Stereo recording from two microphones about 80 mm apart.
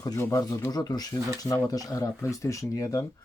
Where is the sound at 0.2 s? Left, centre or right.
Left.